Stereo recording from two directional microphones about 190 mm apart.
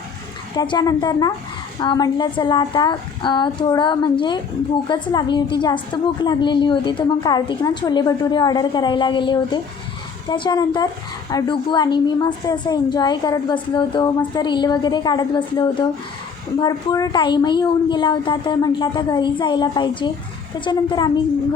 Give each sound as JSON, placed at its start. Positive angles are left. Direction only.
{"t": 0.5, "sound": "a woman's voice", "side_deg": 20}